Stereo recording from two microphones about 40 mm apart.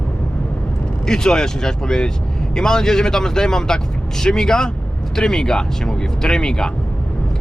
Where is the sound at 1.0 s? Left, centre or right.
Centre.